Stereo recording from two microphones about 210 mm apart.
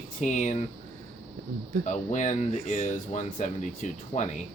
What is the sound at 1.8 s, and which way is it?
Speech, 35° left (ahead or behind).